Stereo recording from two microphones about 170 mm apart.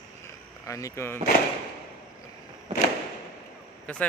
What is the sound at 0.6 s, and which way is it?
Speech, 20° left (ahead or behind).